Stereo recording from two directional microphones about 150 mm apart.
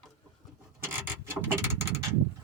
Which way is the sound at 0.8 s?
15° right (ahead or behind).